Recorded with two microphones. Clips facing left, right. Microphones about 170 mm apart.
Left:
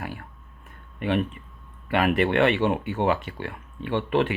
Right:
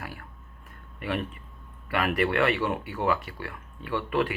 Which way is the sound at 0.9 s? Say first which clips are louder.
Left 6 dB; 20° left (ahead or behind).